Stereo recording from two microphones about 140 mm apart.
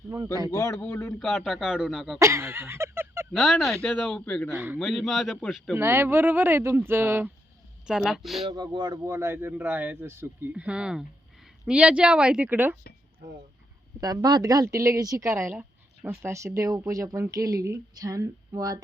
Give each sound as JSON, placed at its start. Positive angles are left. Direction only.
{"t": 0.4, "sound": "a man's voice", "side_deg": 20}
{"t": 2.1, "sound": "a sound", "side_deg": -20}
{"t": 3.3, "sound": "a man's voice", "side_deg": 0}
{"t": 4.5, "sound": "speech", "side_deg": -15}
{"t": 4.8, "sound": "a man's voice", "side_deg": 0}
{"t": 5.7, "sound": "speech", "side_deg": -15}
{"t": 7.9, "sound": "a man's voice", "side_deg": -5}
{"t": 8.4, "sound": "speech", "side_deg": -30}
{"t": 9.0, "sound": "speech", "side_deg": -20}
{"t": 14.0, "sound": "a woman's voice", "side_deg": -30}